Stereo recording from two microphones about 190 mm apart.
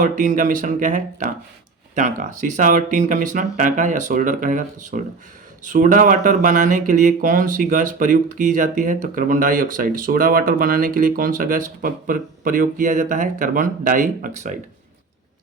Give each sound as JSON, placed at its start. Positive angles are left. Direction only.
{"t": 0.0, "sound": "speech", "side_deg": -45}